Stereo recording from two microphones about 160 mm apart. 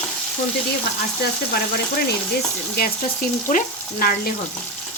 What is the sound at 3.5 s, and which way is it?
Frying, 55° left (ahead or behind).